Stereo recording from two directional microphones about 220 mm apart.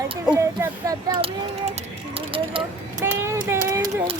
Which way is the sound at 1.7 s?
25° right (ahead or behind).